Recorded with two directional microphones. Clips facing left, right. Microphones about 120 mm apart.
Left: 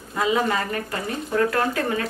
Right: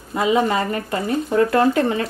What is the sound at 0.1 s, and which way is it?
Speech, 20° right (ahead or behind).